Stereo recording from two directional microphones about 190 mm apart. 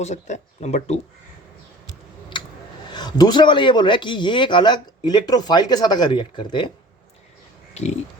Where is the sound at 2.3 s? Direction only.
25° left (ahead or behind).